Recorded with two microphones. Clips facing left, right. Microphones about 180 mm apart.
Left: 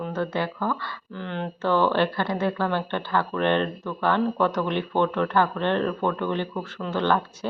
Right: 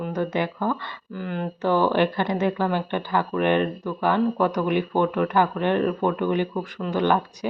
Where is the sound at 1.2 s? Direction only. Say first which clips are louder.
Right 2 dB; 5° right (ahead or behind).